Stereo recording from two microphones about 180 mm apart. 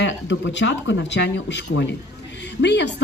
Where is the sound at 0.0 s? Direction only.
85° left.